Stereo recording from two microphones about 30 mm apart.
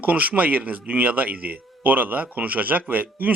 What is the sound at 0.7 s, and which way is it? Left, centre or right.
Speech, right.